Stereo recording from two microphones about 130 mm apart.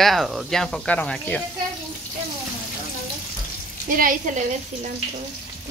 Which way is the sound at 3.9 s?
90° right.